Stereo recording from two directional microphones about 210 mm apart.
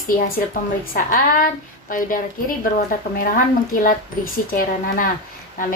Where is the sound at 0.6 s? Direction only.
40° left (ahead or behind).